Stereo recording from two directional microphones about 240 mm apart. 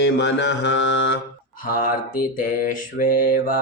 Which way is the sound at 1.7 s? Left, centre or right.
Left.